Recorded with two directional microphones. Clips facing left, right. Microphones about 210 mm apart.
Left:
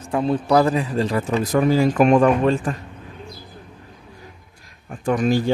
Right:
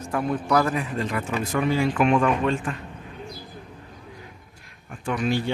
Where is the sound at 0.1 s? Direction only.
25° left (ahead or behind).